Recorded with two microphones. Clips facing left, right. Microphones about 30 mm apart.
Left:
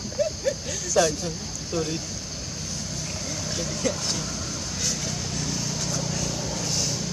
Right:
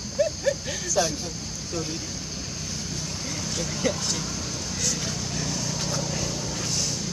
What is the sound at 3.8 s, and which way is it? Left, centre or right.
Speech, centre.